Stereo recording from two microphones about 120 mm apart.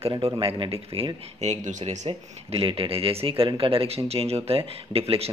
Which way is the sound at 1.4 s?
80° right.